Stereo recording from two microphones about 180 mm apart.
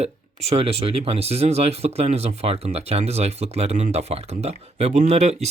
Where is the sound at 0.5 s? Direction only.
35° right (ahead or behind).